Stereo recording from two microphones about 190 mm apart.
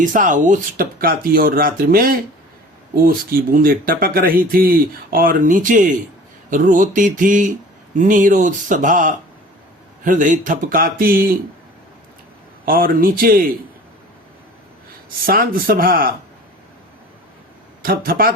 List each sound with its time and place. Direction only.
0.0 s speech: 45° right (ahead or behind)
12.6 s speech: 50° right (ahead or behind)
15.3 s speech: 50° right (ahead or behind)
17.8 s speech: 50° right (ahead or behind)